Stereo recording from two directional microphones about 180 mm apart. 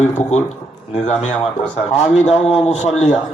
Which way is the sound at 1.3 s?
10° left (ahead or behind).